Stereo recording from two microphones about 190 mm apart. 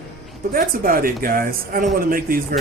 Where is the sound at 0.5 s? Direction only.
45° right (ahead or behind).